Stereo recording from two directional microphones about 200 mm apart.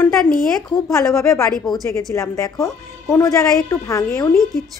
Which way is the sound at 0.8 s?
15° left (ahead or behind).